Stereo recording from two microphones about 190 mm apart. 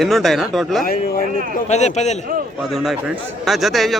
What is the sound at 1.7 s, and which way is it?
Speech, 35° left (ahead or behind).